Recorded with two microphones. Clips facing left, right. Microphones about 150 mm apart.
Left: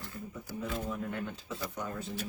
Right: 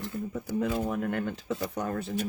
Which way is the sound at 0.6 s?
75° right (ahead or behind).